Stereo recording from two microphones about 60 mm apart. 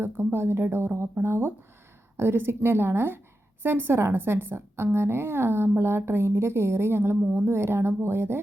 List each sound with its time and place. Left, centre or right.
0.0 s a woman's voice: right